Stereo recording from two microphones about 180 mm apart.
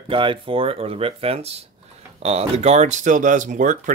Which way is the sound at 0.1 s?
30° right (ahead or behind).